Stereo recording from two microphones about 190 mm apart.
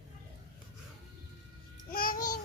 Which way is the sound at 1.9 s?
50° left (ahead or behind).